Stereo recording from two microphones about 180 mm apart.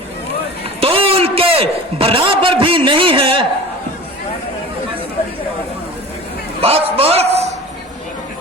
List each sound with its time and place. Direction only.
0.8 s a man's voice: 30° right (ahead or behind)
6.6 s a man's voice: 35° right (ahead or behind)